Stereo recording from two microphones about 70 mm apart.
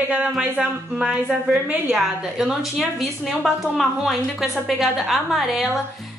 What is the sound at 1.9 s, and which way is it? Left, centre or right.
A woman's voice, centre.